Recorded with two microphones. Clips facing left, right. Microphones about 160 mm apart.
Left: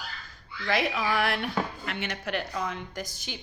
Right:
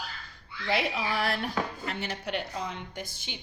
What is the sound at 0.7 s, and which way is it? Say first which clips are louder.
A woman's voice: left 2 dB; 30° right (ahead or behind).